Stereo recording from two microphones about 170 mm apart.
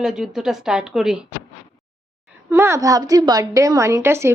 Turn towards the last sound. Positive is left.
turn(degrees=-15)  # may be behind; listen again after turning